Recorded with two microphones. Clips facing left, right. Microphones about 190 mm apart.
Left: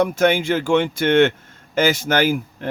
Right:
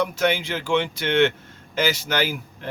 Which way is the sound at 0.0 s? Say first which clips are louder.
Left 5 dB; 50° left (ahead or behind).